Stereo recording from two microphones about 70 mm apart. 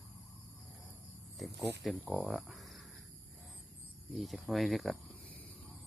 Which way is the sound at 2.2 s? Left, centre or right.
Centre.